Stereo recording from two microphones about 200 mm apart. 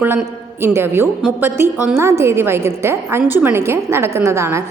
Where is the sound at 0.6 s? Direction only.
10° right (ahead or behind).